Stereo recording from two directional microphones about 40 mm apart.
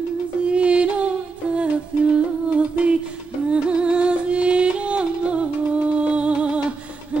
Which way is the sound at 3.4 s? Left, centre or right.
Right.